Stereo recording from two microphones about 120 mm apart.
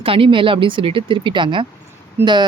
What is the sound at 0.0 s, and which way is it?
Speech, 50° right (ahead or behind).